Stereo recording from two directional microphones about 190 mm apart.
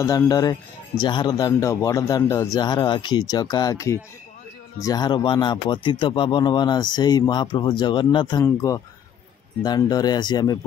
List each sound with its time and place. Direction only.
0.0 s speech: 15° left (ahead or behind)